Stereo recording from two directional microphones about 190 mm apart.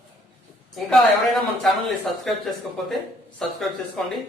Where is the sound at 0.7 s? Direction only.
Centre (ahead or behind).